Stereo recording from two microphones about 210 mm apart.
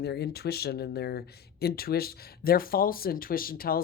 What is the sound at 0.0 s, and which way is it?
Speech, 50° left (ahead or behind).